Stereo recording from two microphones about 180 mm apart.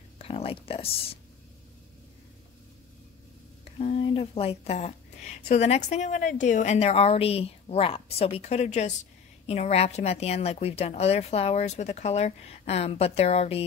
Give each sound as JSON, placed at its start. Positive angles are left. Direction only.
{"t": 0.2, "sound": "speech", "side_deg": 30}
{"t": 3.8, "sound": "a woman's voice", "side_deg": 35}